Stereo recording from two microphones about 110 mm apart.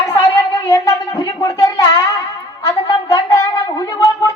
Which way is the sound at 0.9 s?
40° left (ahead or behind).